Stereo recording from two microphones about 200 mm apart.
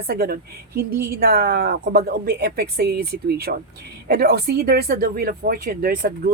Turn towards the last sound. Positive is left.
turn(degrees=-45)  # may be behind; listen again after turning